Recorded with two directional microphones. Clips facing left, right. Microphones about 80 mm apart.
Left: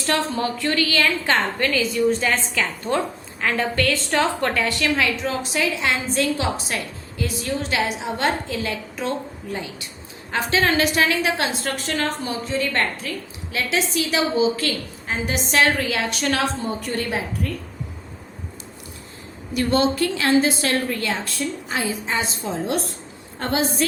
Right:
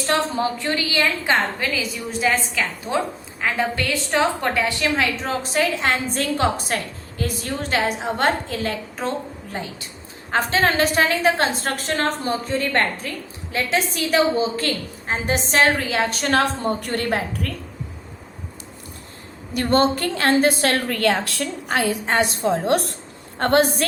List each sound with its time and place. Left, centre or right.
0.0 s a woman's voice: right
1.5 s a woman's voice: centre
5.2 s a woman's voice: right
19.5 s a woman's voice: right